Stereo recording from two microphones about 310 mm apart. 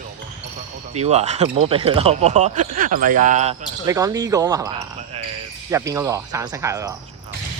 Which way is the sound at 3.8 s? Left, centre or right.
Centre.